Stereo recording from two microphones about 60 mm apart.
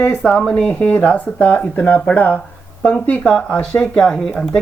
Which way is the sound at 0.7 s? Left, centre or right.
Left.